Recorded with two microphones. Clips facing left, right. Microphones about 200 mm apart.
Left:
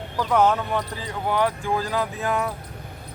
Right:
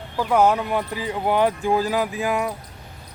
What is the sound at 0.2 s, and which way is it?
Speech, 10° right (ahead or behind).